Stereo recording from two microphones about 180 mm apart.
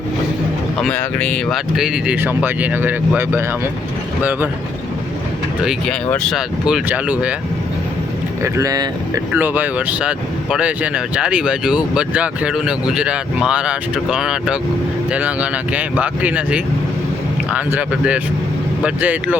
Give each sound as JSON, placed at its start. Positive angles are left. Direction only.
{"t": 0.8, "sound": "speech", "side_deg": 5}
{"t": 4.2, "sound": "speech", "side_deg": -10}
{"t": 5.5, "sound": "speech", "side_deg": 0}
{"t": 8.4, "sound": "speech", "side_deg": -20}
{"t": 9.3, "sound": "speech", "side_deg": -10}